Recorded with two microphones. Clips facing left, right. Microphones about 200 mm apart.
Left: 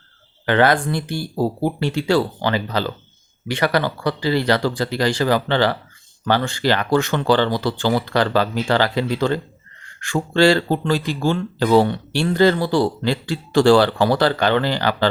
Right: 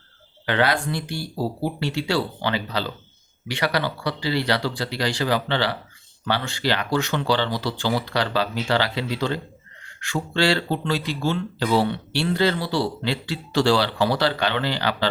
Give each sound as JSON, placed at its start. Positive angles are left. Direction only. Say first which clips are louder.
{"t": 0.4, "sound": "speech", "louder": "left 5 dB", "side_deg": 50}